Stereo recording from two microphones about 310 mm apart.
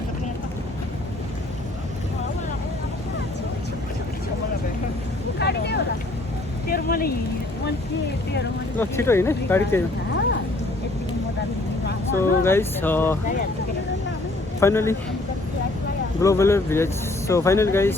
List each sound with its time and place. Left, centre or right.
5.4 s vehicle: left
6.7 s a sound: left
8.8 s speech: centre
12.2 s speech: centre
14.6 s speech: centre
16.2 s speech: centre